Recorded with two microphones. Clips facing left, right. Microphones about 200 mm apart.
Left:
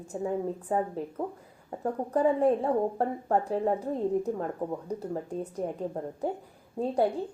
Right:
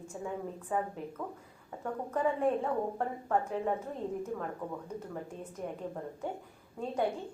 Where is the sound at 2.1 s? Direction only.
35° left (ahead or behind).